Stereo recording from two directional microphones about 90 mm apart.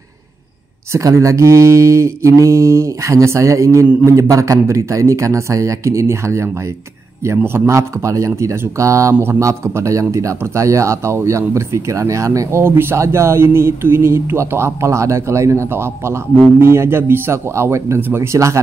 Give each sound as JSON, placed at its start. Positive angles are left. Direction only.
{"t": 0.9, "sound": "a man's voice", "side_deg": -35}